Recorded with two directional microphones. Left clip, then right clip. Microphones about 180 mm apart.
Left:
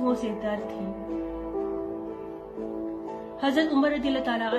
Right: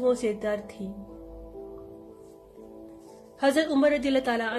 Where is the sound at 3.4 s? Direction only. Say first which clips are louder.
Right 2 dB; 35° right (ahead or behind).